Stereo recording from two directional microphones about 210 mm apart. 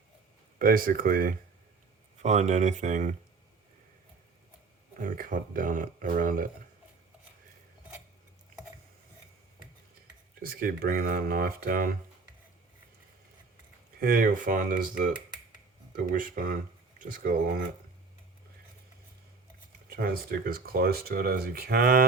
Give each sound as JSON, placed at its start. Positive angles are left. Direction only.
{"t": 0.6, "sound": "speech", "side_deg": -40}
{"t": 4.9, "sound": "speech", "side_deg": -40}
{"t": 10.4, "sound": "speech", "side_deg": -40}
{"t": 14.0, "sound": "speech", "side_deg": -40}
{"t": 20.0, "sound": "speech", "side_deg": -45}